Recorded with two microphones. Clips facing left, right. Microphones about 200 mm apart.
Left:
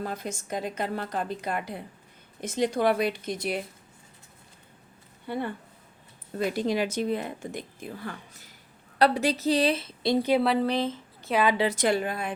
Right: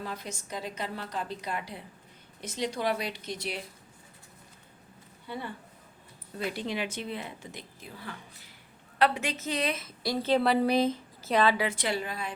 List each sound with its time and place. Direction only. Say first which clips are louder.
0.0 s a woman's voice: left 5 dB; 50° left (ahead or behind)
5.3 s speech: left 7 dB; 55° left (ahead or behind)
6.3 s a woman's voice: left 7 dB; 45° left (ahead or behind); by 10.2 s 25° left (ahead or behind)
10.6 s speech: right 1 dB; 10° right (ahead or behind)
11.2 s a woman's voice: left 1 dB; centre (ahead or behind)
11.5 s a woman's voice: left 5 dB; 30° left (ahead or behind)
11.8 s a woman's voice: left 6 dB; 50° left (ahead or behind)